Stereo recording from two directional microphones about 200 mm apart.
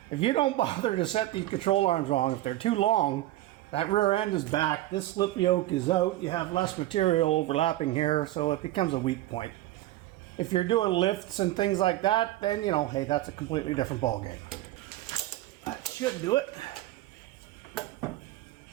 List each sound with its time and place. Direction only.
0.2 s a man's voice: 25° left (ahead or behind)
16.3 s a man's voice: 20° left (ahead or behind)